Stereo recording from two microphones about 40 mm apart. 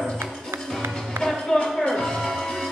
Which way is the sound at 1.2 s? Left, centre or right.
Right.